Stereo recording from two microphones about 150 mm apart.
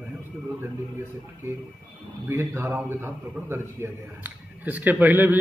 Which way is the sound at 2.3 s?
15° right (ahead or behind).